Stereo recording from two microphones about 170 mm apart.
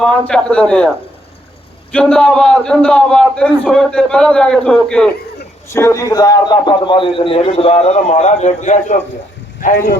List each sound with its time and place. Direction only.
0.0 s a man's voice: 5° left (ahead or behind)
1.9 s a man's voice: 5° left (ahead or behind)
5.7 s a man's voice: 15° left (ahead or behind); by 9.0 s 45° left (ahead or behind)